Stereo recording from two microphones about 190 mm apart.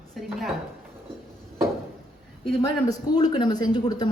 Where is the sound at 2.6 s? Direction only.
20° left (ahead or behind).